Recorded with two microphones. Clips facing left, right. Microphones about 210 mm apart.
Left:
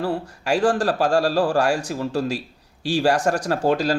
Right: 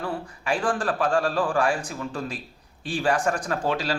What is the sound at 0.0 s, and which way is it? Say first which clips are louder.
A man's voice: left 6 dB; 40° left (ahead or behind).